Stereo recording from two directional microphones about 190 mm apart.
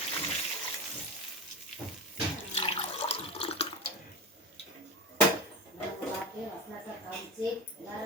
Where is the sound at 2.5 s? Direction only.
30° left (ahead or behind).